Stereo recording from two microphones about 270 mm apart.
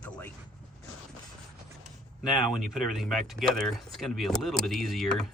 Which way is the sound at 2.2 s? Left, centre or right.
Centre.